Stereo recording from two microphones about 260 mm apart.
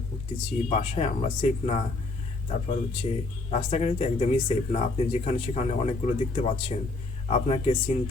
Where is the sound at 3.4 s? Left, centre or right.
Left.